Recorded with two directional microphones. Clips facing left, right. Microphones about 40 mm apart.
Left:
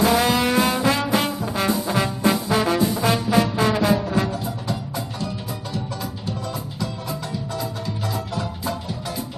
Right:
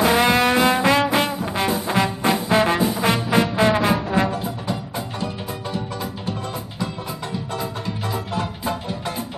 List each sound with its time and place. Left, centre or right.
0.3 s music: right
3.0 s trombone: right
4.6 s music: right